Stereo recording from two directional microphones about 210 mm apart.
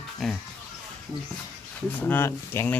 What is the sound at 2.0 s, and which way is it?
Speech, 10° left (ahead or behind).